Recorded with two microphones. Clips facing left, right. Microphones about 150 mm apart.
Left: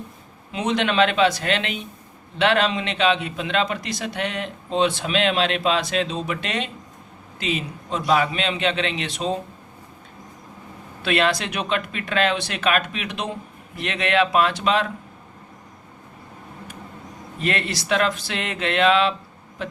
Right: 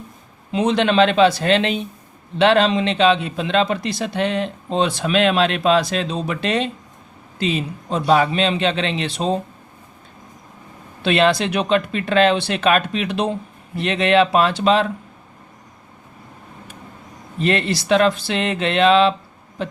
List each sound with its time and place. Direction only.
0.5 s a man's voice: 30° right (ahead or behind)
11.0 s a man's voice: 25° right (ahead or behind)
17.4 s speech: 30° right (ahead or behind)